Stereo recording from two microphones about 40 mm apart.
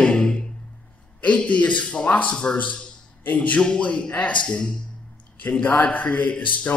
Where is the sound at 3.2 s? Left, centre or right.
Left.